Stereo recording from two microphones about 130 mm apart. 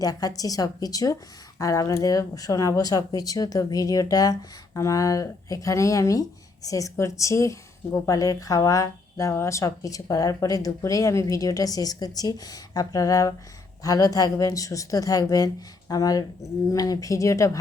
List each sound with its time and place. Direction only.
0.0 s speech: 30° left (ahead or behind)